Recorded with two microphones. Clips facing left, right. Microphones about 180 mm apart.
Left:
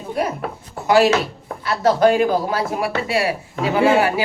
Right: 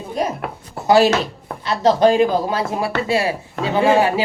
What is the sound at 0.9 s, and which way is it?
Speech, 30° right (ahead or behind).